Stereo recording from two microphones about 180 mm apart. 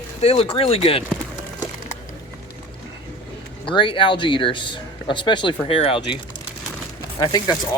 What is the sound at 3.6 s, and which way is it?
Speech, 30° left (ahead or behind).